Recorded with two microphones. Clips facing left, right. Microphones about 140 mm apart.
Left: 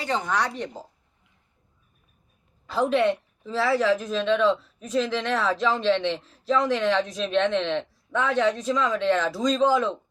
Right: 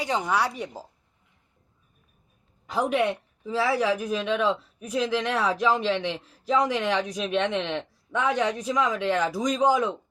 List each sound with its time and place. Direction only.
0.0 s speech: 10° right (ahead or behind)
2.6 s speech: 15° right (ahead or behind)